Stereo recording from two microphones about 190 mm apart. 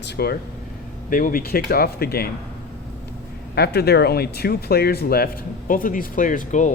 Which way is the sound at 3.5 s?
60° left (ahead or behind).